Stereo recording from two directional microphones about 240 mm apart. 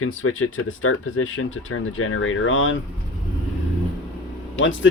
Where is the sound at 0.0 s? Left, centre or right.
Left.